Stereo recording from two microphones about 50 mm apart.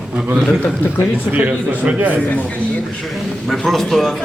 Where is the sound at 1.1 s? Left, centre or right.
Right.